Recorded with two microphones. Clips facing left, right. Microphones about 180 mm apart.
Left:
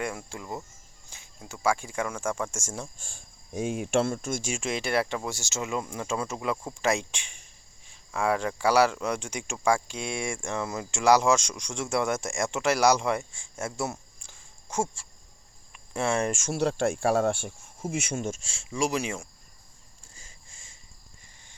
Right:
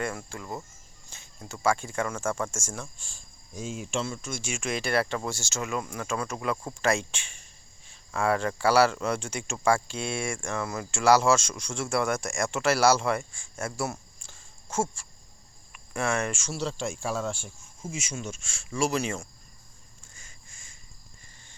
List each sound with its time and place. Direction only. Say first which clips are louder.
0.0 s speech: even; 15° left (ahead or behind)
3.0 s speech: left 3 dB; 55° left (ahead or behind)
4.6 s speech: right 1 dB; 20° left (ahead or behind)
14.2 s a sound: right 1 dB; 15° left (ahead or behind)
15.7 s cricket: left 1 dB; 25° left (ahead or behind)
16.3 s speech: left 5 dB; 50° left (ahead or behind)
18.4 s speech: even; 25° left (ahead or behind)
20.1 s a sound: left 2 dB; 30° left (ahead or behind)